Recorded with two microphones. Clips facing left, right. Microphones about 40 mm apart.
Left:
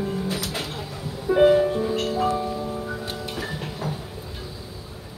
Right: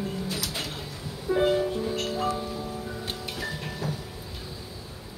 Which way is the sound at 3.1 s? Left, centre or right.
Centre.